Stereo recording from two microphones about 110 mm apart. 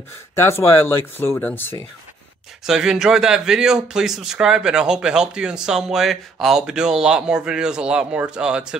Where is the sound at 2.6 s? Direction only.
5° right (ahead or behind).